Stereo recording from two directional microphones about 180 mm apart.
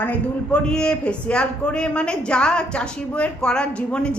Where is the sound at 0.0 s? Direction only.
5° left (ahead or behind).